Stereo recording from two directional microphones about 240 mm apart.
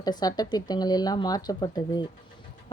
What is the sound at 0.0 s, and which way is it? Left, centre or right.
Speech, centre.